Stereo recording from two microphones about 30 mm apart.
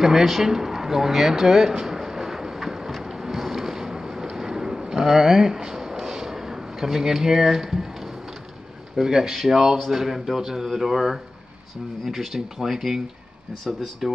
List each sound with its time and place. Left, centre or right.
0.0 s speech: centre
2.0 s vehicle: centre
3.0 s a sound: centre
8.9 s speech: centre
14.0 s speech: centre